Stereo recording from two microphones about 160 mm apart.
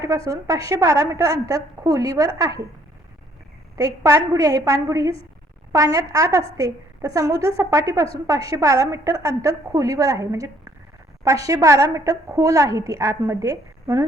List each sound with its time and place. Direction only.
0.3 s a woman's voice: 20° right (ahead or behind)
3.8 s a woman's voice: 20° right (ahead or behind)